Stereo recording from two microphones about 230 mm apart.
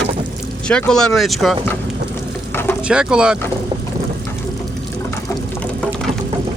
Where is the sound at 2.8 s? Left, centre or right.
Centre.